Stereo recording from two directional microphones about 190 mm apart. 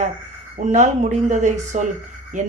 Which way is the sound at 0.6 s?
40° right (ahead or behind).